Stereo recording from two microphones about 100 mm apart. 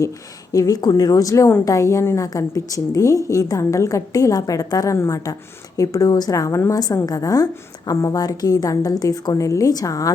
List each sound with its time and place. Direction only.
0.5 s a woman's voice: 35° left (ahead or behind)